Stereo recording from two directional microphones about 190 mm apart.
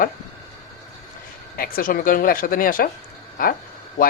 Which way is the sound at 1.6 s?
50° left (ahead or behind).